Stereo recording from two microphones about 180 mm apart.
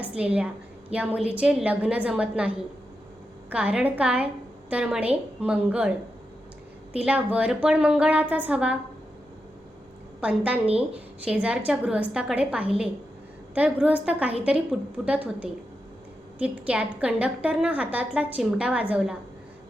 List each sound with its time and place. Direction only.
0.0 s a woman's voice: 5° right (ahead or behind)
6.9 s a woman's voice: 5° right (ahead or behind)
10.2 s a woman's voice: 5° right (ahead or behind)